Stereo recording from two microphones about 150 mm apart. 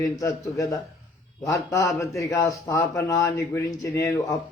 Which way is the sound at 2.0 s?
20° left (ahead or behind).